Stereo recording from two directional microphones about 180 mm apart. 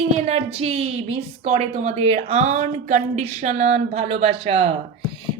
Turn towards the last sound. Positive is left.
turn(degrees=-30)  # may be behind; listen again after turning